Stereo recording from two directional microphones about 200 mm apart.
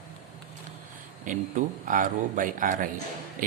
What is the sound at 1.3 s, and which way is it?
Speech, 40° right (ahead or behind).